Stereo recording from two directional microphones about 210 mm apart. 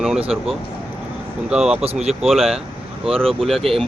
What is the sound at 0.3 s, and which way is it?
Speech, centre (ahead or behind).